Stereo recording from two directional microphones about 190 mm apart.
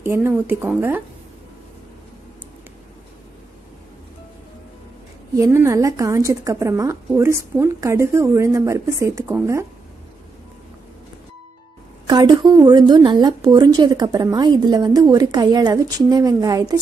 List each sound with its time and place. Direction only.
0.0 s a woman's voice: 10° right (ahead or behind)
5.3 s a woman's voice: 15° right (ahead or behind)
12.1 s a woman's voice: 20° right (ahead or behind)